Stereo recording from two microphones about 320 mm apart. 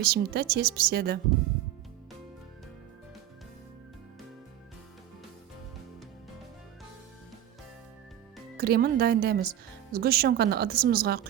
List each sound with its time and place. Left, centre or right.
0.0 s speech: right
8.5 s speech: right